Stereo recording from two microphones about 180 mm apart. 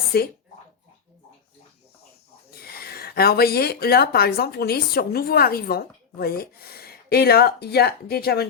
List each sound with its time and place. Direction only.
0.1 s speech: 60° left (ahead or behind)
2.6 s speech: 60° left (ahead or behind)